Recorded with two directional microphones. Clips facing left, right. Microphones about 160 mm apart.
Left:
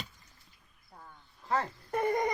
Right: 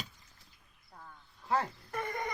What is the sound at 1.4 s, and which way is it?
Dog, 5° right (ahead or behind).